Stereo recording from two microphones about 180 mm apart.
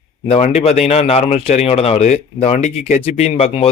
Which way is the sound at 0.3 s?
40° left (ahead or behind).